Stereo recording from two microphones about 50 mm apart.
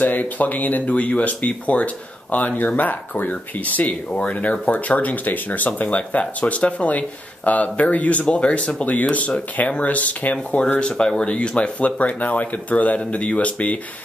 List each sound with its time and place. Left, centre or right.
0.0 s speech: left
10.3 s speech: centre